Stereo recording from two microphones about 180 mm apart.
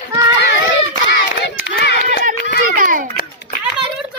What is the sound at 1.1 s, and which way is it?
Hands, 65° left (ahead or behind).